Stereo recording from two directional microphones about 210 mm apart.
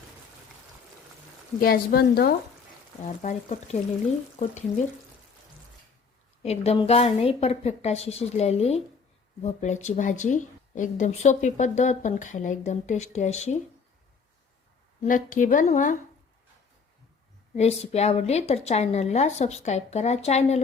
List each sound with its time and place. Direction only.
1.5 s a woman's voice: 45° left (ahead or behind)
3.1 s a woman's voice: 35° left (ahead or behind)
6.4 s a woman's voice: 30° left (ahead or behind)
15.0 s a woman's voice: 40° left (ahead or behind)
17.5 s a woman's voice: 30° left (ahead or behind)